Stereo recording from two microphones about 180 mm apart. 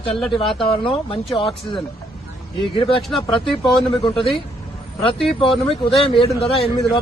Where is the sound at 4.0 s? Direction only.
30° left (ahead or behind).